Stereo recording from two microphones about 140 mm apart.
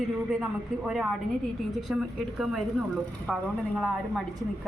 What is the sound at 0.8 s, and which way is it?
A woman's voice, 5° right (ahead or behind).